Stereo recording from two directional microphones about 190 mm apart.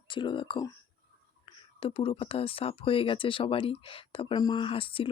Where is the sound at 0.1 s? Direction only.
25° left (ahead or behind).